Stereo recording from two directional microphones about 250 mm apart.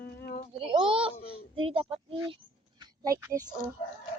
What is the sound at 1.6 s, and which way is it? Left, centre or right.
Speech, right.